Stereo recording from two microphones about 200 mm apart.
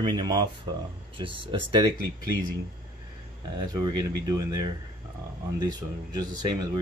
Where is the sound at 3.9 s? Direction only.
20° right (ahead or behind).